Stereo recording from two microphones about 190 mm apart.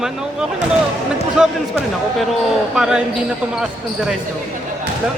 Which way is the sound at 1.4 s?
5° right (ahead or behind).